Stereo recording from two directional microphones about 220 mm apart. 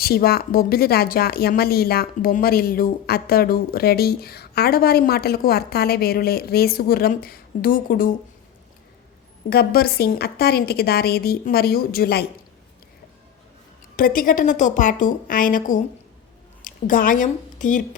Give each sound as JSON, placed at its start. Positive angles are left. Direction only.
{"t": 0.0, "sound": "speech", "side_deg": 45}
{"t": 9.5, "sound": "speech", "side_deg": 45}
{"t": 13.9, "sound": "a woman's voice", "side_deg": 40}